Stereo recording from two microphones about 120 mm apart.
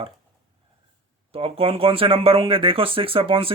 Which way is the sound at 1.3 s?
50° right (ahead or behind).